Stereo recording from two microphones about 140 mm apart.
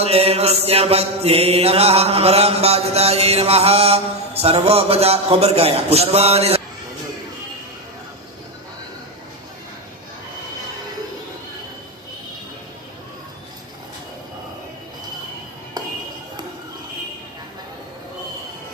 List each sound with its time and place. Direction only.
0.0 s mantra: 45° right (ahead or behind)